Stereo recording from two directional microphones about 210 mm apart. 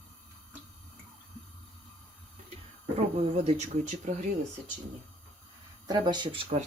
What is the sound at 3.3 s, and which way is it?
Speech, 35° right (ahead or behind).